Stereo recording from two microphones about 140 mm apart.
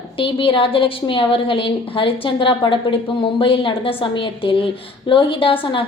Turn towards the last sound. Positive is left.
turn(degrees=40)  # may be behind; listen again after turning